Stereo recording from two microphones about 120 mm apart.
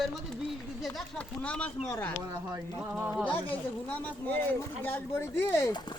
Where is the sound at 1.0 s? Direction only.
10° left (ahead or behind).